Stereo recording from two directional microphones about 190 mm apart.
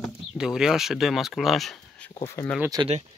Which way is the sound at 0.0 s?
Centre (ahead or behind).